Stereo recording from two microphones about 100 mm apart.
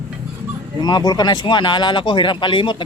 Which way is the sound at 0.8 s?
45° left (ahead or behind).